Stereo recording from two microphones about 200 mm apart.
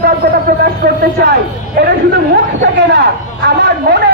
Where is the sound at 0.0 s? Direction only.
55° right (ahead or behind).